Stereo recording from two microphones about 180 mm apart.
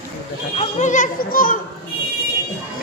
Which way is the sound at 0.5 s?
45° left (ahead or behind).